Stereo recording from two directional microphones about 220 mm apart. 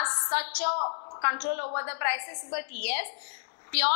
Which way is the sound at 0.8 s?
25° left (ahead or behind).